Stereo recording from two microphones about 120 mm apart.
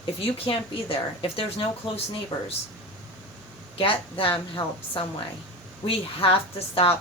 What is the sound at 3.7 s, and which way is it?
A woman's voice, 50° left (ahead or behind).